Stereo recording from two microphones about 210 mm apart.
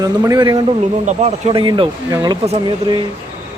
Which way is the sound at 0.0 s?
15° right (ahead or behind).